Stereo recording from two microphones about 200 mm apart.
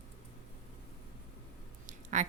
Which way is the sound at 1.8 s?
35° right (ahead or behind).